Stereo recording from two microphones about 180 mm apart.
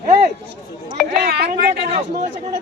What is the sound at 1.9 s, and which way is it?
Chatter, 40° right (ahead or behind).